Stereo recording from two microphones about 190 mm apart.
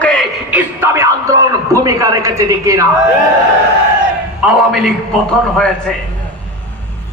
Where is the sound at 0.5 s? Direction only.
15° right (ahead or behind).